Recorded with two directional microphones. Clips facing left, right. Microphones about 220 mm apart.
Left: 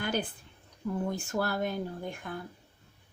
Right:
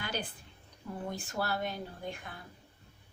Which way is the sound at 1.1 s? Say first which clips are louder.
Left 4 dB; 50° left (ahead or behind).